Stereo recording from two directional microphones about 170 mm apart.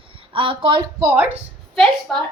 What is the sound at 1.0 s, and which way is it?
Speech, 10° right (ahead or behind).